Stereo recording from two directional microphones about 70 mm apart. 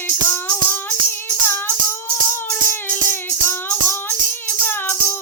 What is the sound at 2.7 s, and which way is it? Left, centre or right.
Music, left.